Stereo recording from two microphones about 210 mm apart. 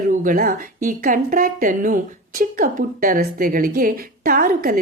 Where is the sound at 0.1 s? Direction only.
40° right (ahead or behind).